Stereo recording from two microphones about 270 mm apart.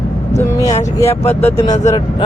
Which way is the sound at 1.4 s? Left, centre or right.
Centre.